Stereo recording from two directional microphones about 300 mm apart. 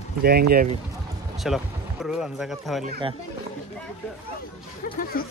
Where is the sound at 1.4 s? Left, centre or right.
Centre.